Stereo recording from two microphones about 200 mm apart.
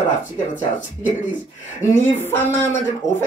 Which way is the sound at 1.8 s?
15° left (ahead or behind).